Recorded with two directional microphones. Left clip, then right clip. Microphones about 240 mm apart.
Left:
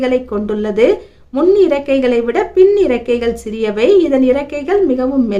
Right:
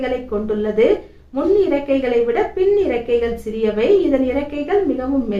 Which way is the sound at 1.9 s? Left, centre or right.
Left.